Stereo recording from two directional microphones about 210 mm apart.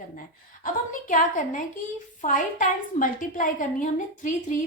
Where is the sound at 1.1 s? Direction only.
40° left (ahead or behind).